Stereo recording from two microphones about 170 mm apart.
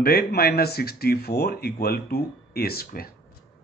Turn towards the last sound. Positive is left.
turn(degrees=60)  # may be behind; listen again after turning